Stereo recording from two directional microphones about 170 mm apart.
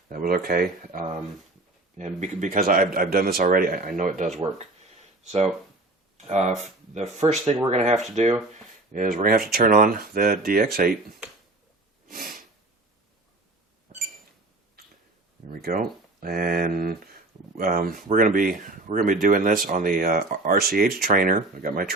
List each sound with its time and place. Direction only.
0.1 s speech: 55° right (ahead or behind)
2.0 s speech: 45° right (ahead or behind)
7.2 s speech: 20° right (ahead or behind)
7.7 s speech: 40° right (ahead or behind); by 10.9 s 60° right (ahead or behind)
12.1 s sniff: 60° right (ahead or behind)
15.6 s speech: 60° right (ahead or behind)